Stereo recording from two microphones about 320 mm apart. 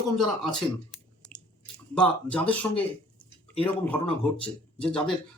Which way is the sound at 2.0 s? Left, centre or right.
Centre.